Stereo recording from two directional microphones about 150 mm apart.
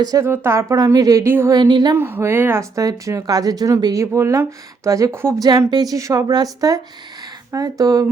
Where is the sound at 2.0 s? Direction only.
15° right (ahead or behind).